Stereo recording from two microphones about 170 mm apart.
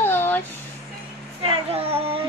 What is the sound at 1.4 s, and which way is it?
Speech, 35° right (ahead or behind).